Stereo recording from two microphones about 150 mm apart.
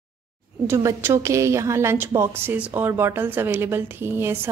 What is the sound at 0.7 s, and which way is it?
A woman's voice, 20° right (ahead or behind).